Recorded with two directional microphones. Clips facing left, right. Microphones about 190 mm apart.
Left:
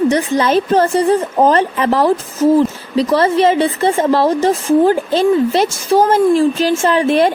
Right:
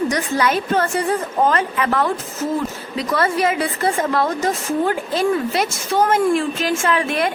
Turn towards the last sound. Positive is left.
turn(degrees=30)  # may be behind; listen again after turning